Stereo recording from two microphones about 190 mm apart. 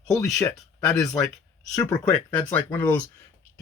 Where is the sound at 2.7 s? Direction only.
10° left (ahead or behind).